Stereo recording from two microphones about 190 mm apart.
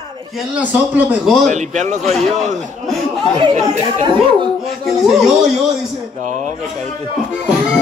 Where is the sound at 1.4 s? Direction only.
40° right (ahead or behind).